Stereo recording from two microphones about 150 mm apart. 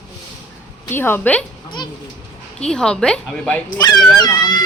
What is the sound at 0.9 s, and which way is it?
Speech, 15° left (ahead or behind).